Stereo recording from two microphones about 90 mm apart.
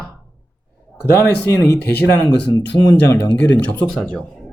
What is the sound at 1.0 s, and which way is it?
Speech, 30° left (ahead or behind).